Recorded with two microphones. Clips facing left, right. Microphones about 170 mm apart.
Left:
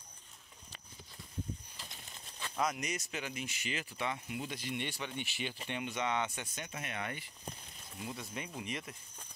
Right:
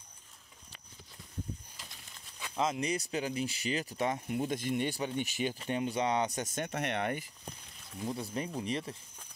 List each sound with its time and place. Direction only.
2.5 s speech: 25° right (ahead or behind); by 7.1 s 65° right (ahead or behind)
8.0 s speech: 35° right (ahead or behind)